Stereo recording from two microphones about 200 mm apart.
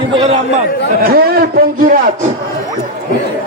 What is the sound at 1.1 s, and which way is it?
Speech, 50° right (ahead or behind).